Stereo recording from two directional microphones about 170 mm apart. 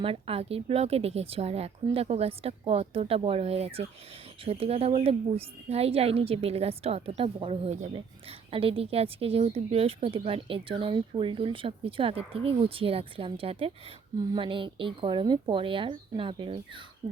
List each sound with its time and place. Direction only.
0.0 s a woman's voice: 35° right (ahead or behind)